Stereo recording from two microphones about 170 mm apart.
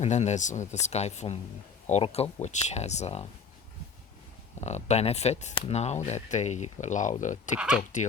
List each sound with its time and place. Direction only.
0.0 s speech: 40° left (ahead or behind)
4.6 s speech: 40° left (ahead or behind)